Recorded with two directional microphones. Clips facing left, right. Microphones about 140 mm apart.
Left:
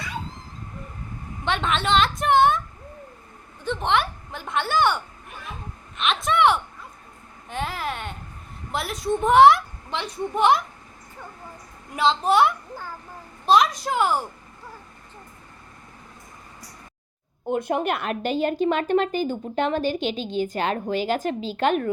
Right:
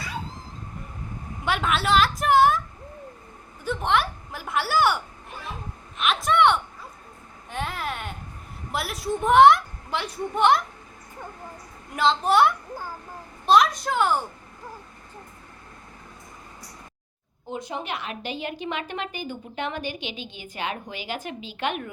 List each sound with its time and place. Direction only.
1.5 s a woman's voice: 5° right (ahead or behind)
3.6 s a woman's voice: 5° right (ahead or behind)
6.0 s a woman's voice: centre (ahead or behind)
11.9 s a woman's voice: centre (ahead or behind)
17.5 s a woman's voice: 55° left (ahead or behind)